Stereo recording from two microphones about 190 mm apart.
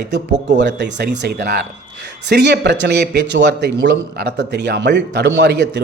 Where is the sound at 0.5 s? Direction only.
65° right (ahead or behind).